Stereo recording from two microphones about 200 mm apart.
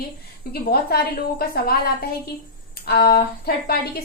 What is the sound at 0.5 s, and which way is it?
A woman's voice, 50° left (ahead or behind).